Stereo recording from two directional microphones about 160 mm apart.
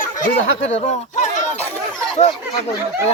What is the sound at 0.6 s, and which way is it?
Speech, 45° left (ahead or behind).